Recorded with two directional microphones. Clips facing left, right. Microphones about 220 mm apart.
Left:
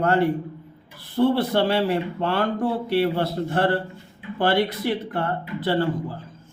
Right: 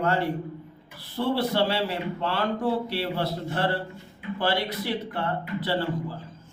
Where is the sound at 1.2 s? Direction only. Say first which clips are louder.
Left 5 dB; 50° left (ahead or behind).